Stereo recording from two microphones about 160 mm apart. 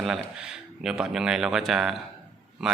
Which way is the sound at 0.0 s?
5° right (ahead or behind).